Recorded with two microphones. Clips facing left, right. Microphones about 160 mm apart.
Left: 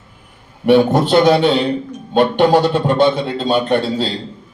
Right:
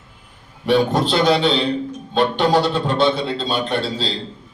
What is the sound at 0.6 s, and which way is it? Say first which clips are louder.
A man's voice: left 5 dB; 55° left (ahead or behind).